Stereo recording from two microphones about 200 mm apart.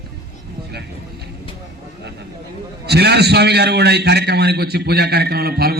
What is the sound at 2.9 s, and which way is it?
A man's voice, 55° right (ahead or behind).